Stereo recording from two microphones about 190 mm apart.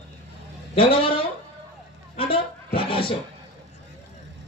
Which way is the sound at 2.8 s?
30° left (ahead or behind).